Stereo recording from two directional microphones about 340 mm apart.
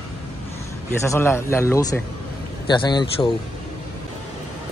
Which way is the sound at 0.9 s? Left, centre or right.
Centre.